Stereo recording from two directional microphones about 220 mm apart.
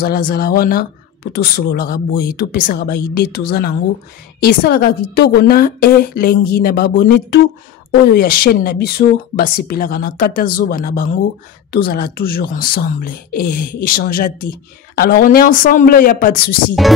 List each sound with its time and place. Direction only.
0.0 s speech: 45° left (ahead or behind)
16.8 s music: centre (ahead or behind)